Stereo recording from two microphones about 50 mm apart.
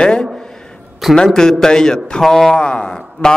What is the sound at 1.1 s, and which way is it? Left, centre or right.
A man's voice, centre.